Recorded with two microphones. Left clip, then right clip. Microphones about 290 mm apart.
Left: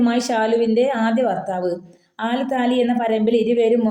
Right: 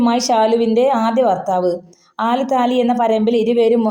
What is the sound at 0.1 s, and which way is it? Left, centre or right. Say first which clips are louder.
Speech: right 5 dB; right.